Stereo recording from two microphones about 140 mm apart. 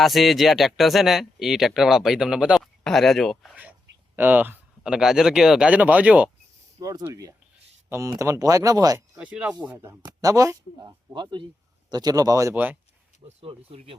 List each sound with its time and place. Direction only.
0.0 s speech: centre (ahead or behind)
3.5 s speech: 10° right (ahead or behind)
6.7 s speech: 25° right (ahead or behind)
9.1 s speech: 10° right (ahead or behind)
9.6 s speech: 20° right (ahead or behind)
13.2 s speech: 40° right (ahead or behind)